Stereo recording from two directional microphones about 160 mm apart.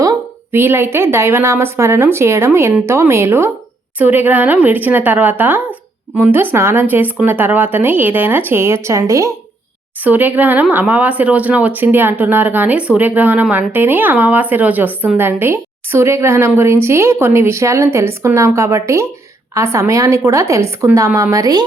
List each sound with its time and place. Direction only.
0.0 s a woman's voice: 20° right (ahead or behind)